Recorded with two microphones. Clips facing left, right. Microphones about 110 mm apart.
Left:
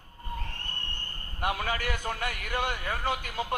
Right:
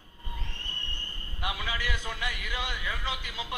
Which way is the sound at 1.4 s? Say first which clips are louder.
Left 4 dB; 50° left (ahead or behind).